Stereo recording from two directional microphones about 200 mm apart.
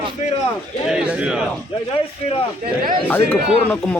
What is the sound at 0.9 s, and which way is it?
Speech, 5° right (ahead or behind).